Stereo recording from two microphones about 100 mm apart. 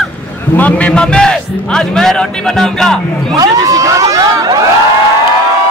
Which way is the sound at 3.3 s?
40° right (ahead or behind).